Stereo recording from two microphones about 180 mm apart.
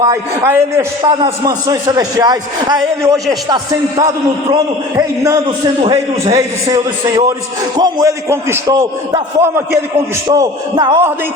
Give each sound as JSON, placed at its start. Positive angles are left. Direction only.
{"t": 0.0, "sound": "a man's voice", "side_deg": -15}
{"t": 7.8, "sound": "a man's voice", "side_deg": -20}